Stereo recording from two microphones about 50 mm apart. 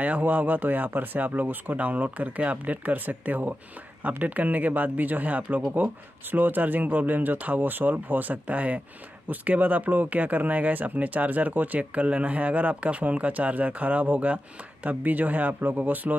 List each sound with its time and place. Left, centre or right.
0.0 s speech: right